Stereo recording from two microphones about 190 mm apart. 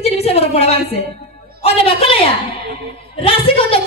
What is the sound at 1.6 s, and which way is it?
Speech, 30° left (ahead or behind).